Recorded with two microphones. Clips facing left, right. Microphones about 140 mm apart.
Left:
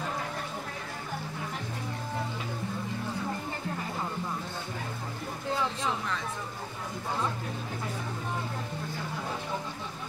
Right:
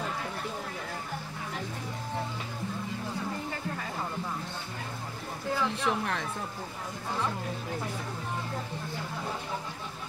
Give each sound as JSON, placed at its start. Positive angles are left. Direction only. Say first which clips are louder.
{"t": 5.9, "sound": "speech", "louder": "right 2 dB", "side_deg": -65}